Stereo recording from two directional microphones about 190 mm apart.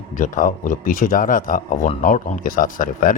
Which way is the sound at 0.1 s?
45° left (ahead or behind).